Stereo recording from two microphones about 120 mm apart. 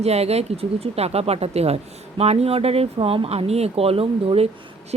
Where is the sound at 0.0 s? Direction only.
60° right (ahead or behind).